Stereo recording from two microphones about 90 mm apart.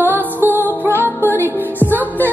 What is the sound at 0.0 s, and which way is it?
Music, 20° right (ahead or behind).